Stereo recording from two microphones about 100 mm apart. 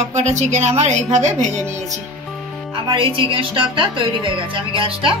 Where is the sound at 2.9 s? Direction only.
60° right (ahead or behind).